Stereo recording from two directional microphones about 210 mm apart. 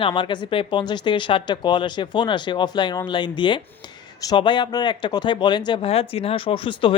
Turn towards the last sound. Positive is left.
turn(degrees=25)  # may be behind; listen again after turning